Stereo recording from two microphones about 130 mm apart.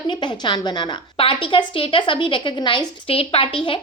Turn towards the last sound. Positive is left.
turn(degrees=45)  # may be behind; listen again after turning